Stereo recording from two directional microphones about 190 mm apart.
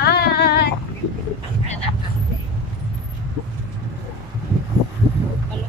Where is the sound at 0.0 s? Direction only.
55° left (ahead or behind).